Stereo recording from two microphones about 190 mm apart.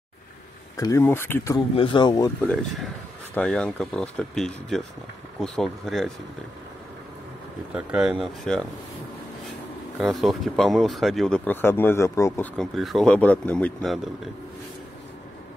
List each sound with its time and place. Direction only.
0.7 s speech: 15° left (ahead or behind)
1.8 s speech: 25° left (ahead or behind)
2.4 s speech: centre (ahead or behind)
7.7 s speech: 5° right (ahead or behind)
9.9 s speech: centre (ahead or behind); by 12.4 s 15° left (ahead or behind)
12.5 s speech: centre (ahead or behind)